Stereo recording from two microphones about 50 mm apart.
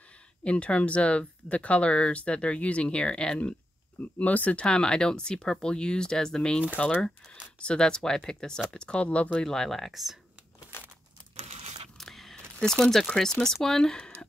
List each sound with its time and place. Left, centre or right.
0.4 s speech: left
4.6 s speech: centre
9.4 s speech: centre
10.7 s crumpling: left
12.0 s a sound: centre
13.1 s speech: centre